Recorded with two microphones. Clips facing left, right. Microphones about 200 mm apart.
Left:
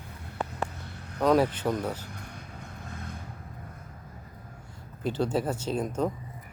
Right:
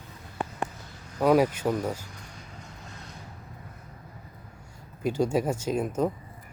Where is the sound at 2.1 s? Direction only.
55° left (ahead or behind).